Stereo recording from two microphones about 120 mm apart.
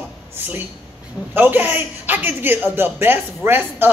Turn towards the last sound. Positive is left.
turn(degrees=-15)  # may be behind; listen again after turning